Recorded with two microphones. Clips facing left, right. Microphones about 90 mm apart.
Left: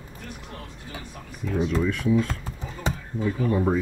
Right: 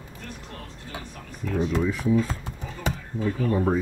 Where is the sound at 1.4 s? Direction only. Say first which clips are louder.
Even; 10° left (ahead or behind).